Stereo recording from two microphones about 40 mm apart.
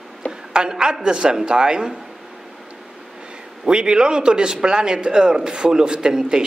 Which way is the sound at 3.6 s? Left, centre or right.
Right.